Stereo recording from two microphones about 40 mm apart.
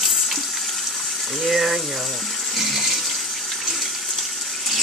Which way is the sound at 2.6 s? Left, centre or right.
Centre.